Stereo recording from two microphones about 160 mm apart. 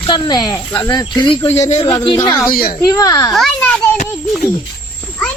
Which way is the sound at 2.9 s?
20° left (ahead or behind).